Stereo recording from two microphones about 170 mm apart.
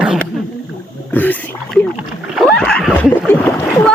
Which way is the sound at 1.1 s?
10° left (ahead or behind).